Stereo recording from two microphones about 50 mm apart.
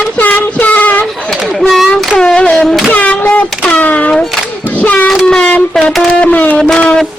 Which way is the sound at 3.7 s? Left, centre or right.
Left.